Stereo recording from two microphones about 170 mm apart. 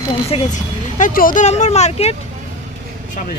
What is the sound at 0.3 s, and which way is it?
Speech, 45° left (ahead or behind).